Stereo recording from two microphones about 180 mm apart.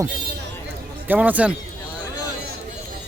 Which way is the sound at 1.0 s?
10° right (ahead or behind).